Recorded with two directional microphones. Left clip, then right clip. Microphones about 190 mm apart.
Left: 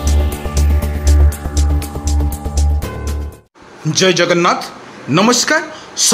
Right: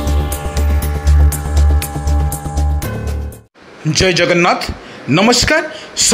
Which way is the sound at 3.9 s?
20° right (ahead or behind).